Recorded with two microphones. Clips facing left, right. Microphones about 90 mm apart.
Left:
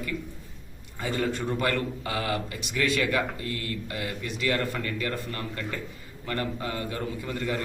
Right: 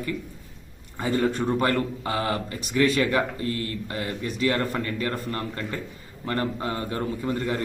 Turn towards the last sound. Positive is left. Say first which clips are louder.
# right 4 dB
turn(degrees=-30)  # may be behind; listen again after turning